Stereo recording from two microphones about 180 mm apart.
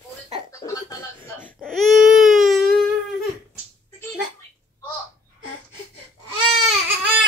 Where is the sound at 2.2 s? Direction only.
Centre (ahead or behind).